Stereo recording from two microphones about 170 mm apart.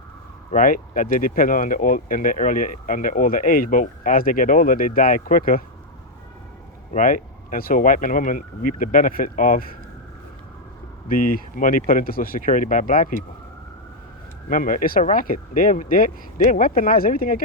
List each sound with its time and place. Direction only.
0.5 s speech: 55° left (ahead or behind)
6.9 s speech: 50° left (ahead or behind)
11.1 s speech: 55° left (ahead or behind)
14.5 s speech: 50° left (ahead or behind)